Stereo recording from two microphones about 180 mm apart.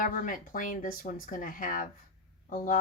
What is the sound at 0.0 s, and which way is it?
Speech, 50° left (ahead or behind).